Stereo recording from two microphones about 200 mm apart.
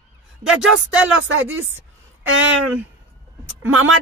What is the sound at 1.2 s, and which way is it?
Speech, 80° right.